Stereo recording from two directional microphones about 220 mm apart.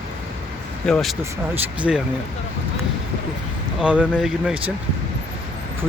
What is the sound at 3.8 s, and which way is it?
Speech, 5° right (ahead or behind).